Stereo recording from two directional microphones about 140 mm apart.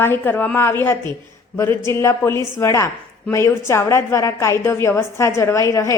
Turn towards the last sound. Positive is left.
turn(degrees=20)  # may be behind; listen again after turning